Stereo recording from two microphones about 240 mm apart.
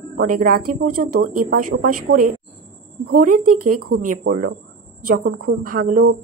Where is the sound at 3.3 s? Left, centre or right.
Right.